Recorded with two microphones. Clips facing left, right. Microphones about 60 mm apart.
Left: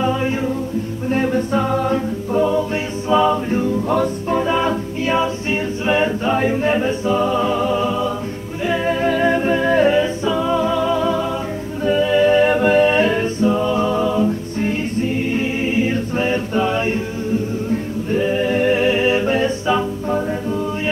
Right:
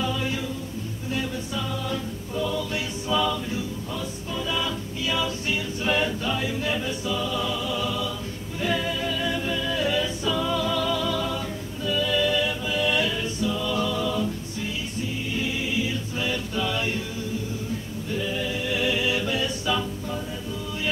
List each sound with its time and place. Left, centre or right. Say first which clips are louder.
0.0 s music: left 8 dB; left
1.0 s a capella: left 11 dB; left
8.8 s music: left 11 dB; left
9.9 s music: left 8 dB; left
12.5 s music: left 14 dB; left
12.8 s music: left 9 dB; left
14.6 s choir: left 11 dB; left